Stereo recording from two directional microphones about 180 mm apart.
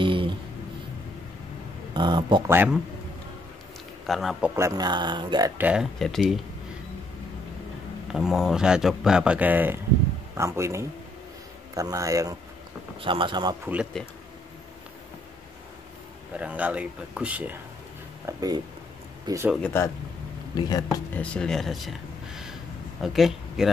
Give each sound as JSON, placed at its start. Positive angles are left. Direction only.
{"t": 0.0, "sound": "a sound", "side_deg": -25}
{"t": 2.0, "sound": "speech", "side_deg": -25}
{"t": 2.4, "sound": "speech", "side_deg": -10}
{"t": 4.0, "sound": "a man's voice", "side_deg": 0}
{"t": 4.6, "sound": "speech", "side_deg": -20}
{"t": 5.6, "sound": "speech", "side_deg": -5}
{"t": 8.1, "sound": "speech", "side_deg": -5}
{"t": 13.0, "sound": "speech", "side_deg": -30}
{"t": 14.0, "sound": "speech", "side_deg": 5}
{"t": 16.3, "sound": "speech", "side_deg": -10}
{"t": 18.2, "sound": "speech", "side_deg": -20}
{"t": 19.5, "sound": "speech", "side_deg": 10}
{"t": 20.5, "sound": "speech", "side_deg": 20}
{"t": 21.2, "sound": "speech", "side_deg": 5}